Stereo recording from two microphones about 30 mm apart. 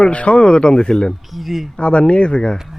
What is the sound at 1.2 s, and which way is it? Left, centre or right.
Speech, centre.